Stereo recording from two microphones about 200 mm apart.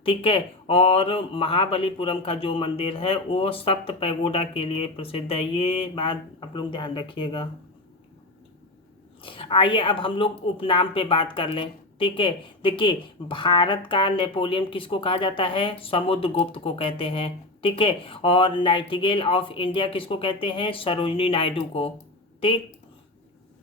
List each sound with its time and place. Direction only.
0.0 s a woman's voice: 30° left (ahead or behind)
9.2 s a woman's voice: 25° left (ahead or behind)